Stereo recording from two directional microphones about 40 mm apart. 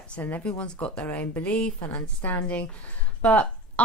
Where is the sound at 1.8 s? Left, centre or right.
Left.